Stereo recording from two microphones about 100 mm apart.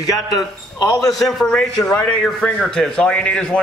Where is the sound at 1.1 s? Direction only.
5° left (ahead or behind).